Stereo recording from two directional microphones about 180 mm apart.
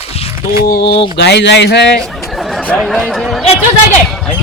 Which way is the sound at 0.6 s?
60° left (ahead or behind).